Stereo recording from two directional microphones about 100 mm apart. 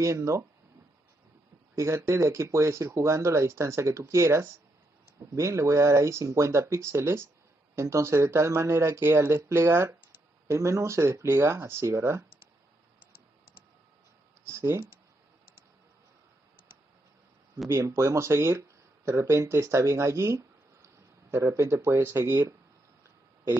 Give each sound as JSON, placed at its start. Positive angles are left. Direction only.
{"t": 0.0, "sound": "speech", "side_deg": -30}
{"t": 1.8, "sound": "speech", "side_deg": -30}
{"t": 14.5, "sound": "speech", "side_deg": -30}
{"t": 17.6, "sound": "speech", "side_deg": -30}